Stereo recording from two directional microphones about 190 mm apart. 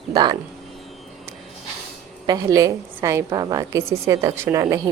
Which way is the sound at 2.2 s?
20° right (ahead or behind).